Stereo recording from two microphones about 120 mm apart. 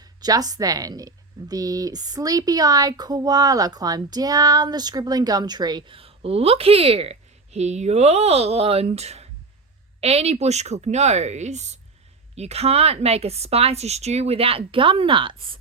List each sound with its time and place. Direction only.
0.0 s speech: 35° right (ahead or behind); by 11.8 s 70° right (ahead or behind)
12.4 s a woman's voice: 60° right (ahead or behind)